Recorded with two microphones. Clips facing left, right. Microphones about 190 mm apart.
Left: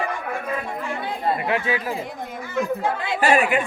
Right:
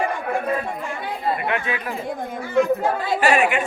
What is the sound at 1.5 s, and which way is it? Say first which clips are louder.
Speech: left 2 dB; 30° left (ahead or behind).